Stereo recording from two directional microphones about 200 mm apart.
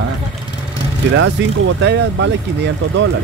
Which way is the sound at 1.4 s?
65° right (ahead or behind).